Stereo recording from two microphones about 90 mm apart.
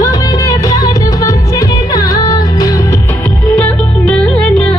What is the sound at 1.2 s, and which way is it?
Music, 45° left (ahead or behind).